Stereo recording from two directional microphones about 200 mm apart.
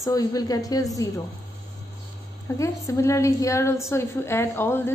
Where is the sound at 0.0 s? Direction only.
15° left (ahead or behind).